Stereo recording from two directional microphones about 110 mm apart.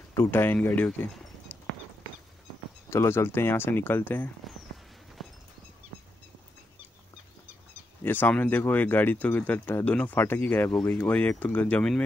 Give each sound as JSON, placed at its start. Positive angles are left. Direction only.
{"t": 0.1, "sound": "speech", "side_deg": 20}
{"t": 1.5, "sound": "a sound", "side_deg": 15}
{"t": 2.9, "sound": "speech", "side_deg": 25}
{"t": 8.0, "sound": "speech", "side_deg": 15}